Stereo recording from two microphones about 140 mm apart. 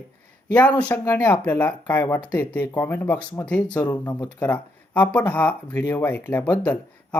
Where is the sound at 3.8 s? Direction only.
30° left (ahead or behind).